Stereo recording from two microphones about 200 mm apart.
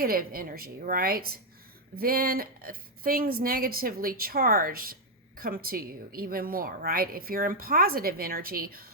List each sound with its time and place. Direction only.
0.0 s a woman's voice: 45° right (ahead or behind)